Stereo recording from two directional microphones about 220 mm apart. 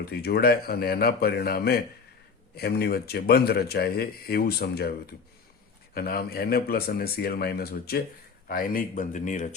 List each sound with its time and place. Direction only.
0.1 s speech: 45° left (ahead or behind)